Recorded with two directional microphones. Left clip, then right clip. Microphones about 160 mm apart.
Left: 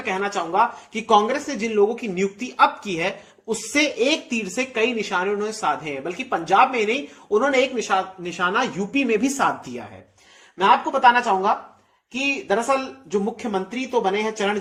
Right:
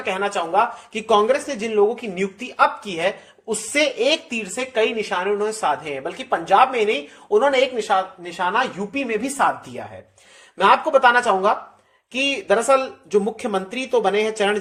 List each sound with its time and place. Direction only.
0.0 s a woman's voice: 15° right (ahead or behind); by 9.8 s centre (ahead or behind)
10.6 s speech: 25° right (ahead or behind)